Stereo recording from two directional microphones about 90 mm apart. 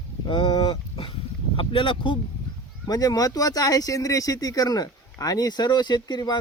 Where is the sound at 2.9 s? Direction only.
45° left (ahead or behind).